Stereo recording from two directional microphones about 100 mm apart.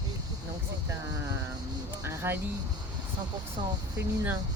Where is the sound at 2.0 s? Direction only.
25° right (ahead or behind).